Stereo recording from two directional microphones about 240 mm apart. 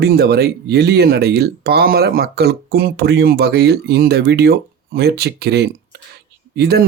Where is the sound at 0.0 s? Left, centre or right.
Right.